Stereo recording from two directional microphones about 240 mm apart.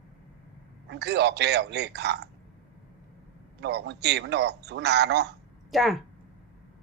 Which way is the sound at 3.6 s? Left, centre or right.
Right.